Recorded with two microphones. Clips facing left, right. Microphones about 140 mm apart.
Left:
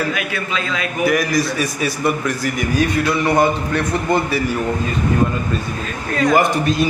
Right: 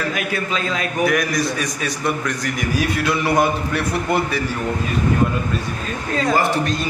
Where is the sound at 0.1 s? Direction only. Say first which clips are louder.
Even; 40° right (ahead or behind).